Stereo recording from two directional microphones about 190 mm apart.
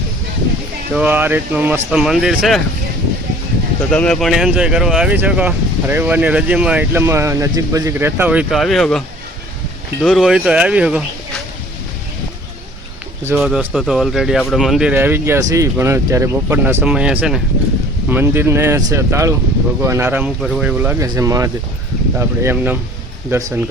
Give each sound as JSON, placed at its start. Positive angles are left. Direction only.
{"t": 0.9, "sound": "speech", "side_deg": -10}
{"t": 3.9, "sound": "speech", "side_deg": 5}
{"t": 13.3, "sound": "speech", "side_deg": -5}